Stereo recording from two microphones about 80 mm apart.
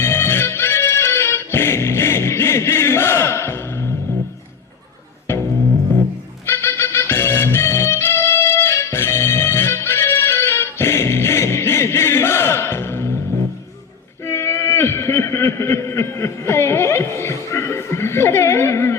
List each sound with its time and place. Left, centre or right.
0.0 s music: left
6.4 s music: left
14.3 s a sound: left